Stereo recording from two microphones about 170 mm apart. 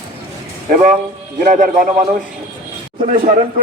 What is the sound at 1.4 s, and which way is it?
Speech, 55° right (ahead or behind).